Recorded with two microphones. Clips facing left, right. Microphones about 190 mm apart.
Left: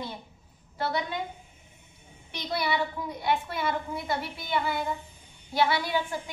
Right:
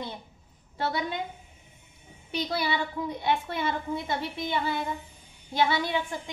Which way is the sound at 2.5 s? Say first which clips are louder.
Left 3 dB; 25° right (ahead or behind).